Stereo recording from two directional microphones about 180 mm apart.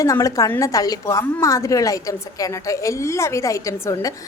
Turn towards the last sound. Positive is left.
turn(degrees=15)  # may be behind; listen again after turning